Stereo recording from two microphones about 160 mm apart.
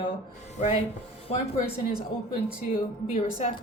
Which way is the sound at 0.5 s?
40° left (ahead or behind).